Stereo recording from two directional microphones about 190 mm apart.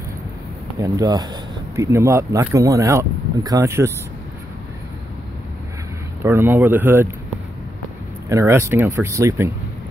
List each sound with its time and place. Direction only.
0.7 s speech: 20° right (ahead or behind)
6.2 s speech: 10° right (ahead or behind)
8.3 s speech: 15° right (ahead or behind)